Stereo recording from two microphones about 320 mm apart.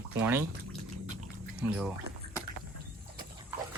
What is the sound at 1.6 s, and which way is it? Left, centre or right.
Speech, centre.